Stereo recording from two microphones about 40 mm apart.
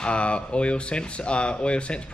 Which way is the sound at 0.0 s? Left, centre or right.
Left.